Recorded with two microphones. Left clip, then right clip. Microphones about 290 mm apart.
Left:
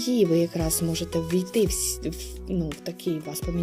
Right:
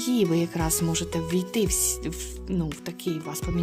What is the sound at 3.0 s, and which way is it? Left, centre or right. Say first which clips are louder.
Speech: left 1 dB; centre.